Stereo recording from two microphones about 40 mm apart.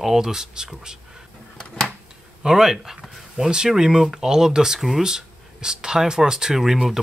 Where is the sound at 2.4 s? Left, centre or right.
Centre.